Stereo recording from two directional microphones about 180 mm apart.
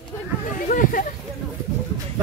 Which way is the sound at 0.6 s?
50° left (ahead or behind).